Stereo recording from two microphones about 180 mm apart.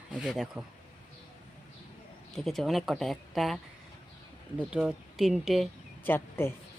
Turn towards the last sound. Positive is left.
turn(degrees=15)  # may be behind; listen again after turning